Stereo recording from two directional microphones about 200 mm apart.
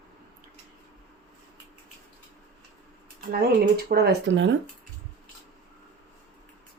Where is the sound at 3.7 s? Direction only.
50° right (ahead or behind).